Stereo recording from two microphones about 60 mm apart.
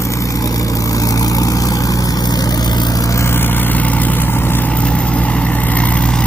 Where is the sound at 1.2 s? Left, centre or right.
Left.